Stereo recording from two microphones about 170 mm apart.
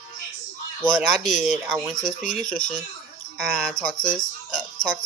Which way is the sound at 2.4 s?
5° left (ahead or behind).